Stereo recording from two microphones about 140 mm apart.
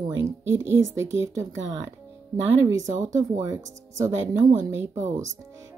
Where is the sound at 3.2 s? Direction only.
25° right (ahead or behind).